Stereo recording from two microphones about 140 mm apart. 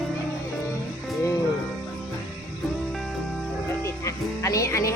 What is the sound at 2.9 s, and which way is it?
Music, centre (ahead or behind).